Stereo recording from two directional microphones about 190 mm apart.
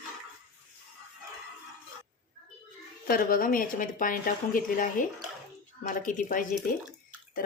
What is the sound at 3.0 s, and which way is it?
A woman's voice, 50° left (ahead or behind).